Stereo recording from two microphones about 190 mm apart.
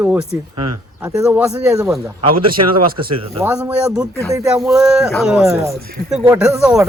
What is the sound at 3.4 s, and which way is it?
Speech, 5° right (ahead or behind).